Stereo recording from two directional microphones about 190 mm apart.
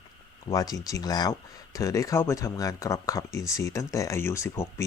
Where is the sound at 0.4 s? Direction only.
20° left (ahead or behind).